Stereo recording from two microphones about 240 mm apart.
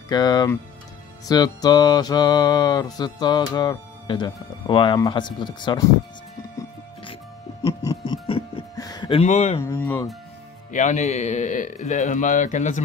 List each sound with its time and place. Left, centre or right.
0.1 s music: centre
9.6 s music: centre
10.7 s a man's voice: left